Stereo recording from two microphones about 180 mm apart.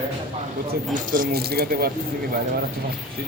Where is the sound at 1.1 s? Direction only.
55° right (ahead or behind).